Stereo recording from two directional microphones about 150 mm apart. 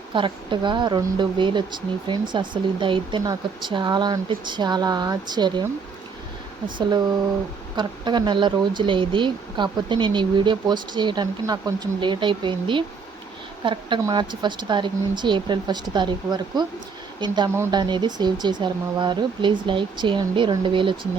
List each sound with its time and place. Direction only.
0.1 s speech: 35° right (ahead or behind)
7.8 s speech: 30° right (ahead or behind)